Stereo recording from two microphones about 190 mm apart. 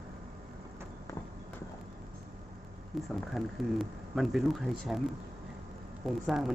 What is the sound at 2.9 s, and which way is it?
Speech, centre (ahead or behind).